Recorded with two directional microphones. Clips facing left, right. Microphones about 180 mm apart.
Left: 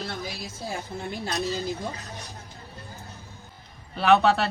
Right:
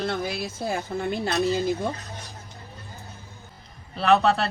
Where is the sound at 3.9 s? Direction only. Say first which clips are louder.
Even; centre (ahead or behind).